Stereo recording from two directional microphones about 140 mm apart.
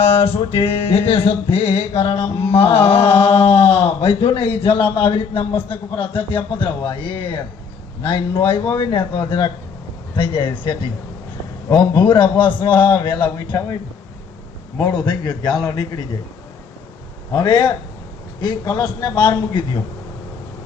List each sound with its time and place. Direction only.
0.0 s music: 40° left (ahead or behind)
2.4 s speech: 45° left (ahead or behind)
6.0 s music: 40° left (ahead or behind)
14.8 s a man's voice: 30° left (ahead or behind)
17.3 s music: 30° left (ahead or behind)